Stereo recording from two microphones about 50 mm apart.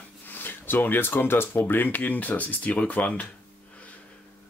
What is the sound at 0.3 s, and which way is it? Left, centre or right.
Speech, left.